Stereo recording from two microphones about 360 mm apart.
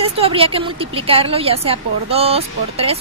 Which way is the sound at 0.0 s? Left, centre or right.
Centre.